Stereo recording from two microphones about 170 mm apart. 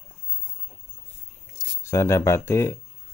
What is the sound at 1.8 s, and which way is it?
Speech, 15° left (ahead or behind).